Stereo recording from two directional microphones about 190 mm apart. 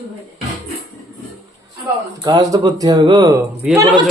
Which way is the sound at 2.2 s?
20° right (ahead or behind).